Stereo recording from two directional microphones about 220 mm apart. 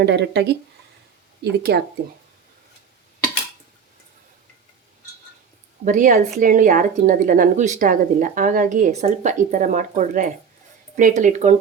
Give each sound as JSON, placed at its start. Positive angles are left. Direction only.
{"t": 0.0, "sound": "speech", "side_deg": -50}
{"t": 1.7, "sound": "speech", "side_deg": -45}
{"t": 5.8, "sound": "a woman's voice", "side_deg": -35}